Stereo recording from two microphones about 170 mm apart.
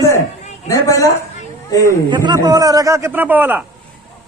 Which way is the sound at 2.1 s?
25° right (ahead or behind).